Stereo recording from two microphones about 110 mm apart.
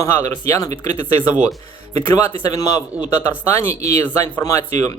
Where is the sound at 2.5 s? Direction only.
35° left (ahead or behind).